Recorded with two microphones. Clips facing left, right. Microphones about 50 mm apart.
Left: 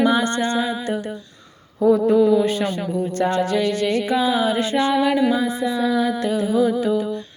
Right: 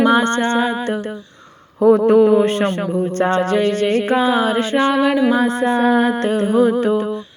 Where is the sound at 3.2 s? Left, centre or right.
Right.